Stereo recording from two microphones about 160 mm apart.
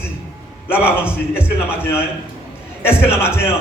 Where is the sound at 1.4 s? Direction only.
15° left (ahead or behind).